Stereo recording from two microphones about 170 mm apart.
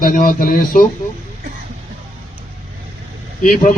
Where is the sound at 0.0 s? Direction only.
55° left (ahead or behind).